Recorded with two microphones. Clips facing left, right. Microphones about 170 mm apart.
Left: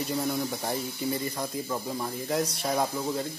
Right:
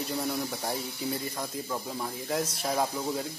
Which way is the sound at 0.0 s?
Centre (ahead or behind).